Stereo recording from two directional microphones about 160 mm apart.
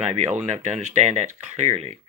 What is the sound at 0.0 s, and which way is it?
Speech, 45° right (ahead or behind).